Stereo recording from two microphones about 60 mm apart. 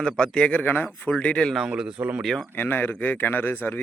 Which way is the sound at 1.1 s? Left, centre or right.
Centre.